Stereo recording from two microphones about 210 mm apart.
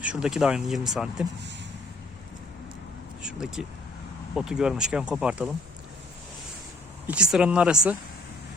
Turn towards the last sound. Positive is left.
turn(degrees=-5)  # may be behind; listen again after turning